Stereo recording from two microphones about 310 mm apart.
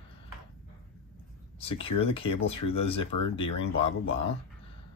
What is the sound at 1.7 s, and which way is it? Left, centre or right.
Speech, centre.